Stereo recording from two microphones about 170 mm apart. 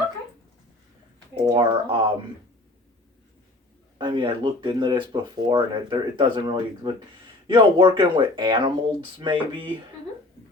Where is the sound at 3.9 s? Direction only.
25° right (ahead or behind).